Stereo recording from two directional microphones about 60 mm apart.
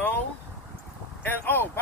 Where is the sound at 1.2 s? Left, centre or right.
Left.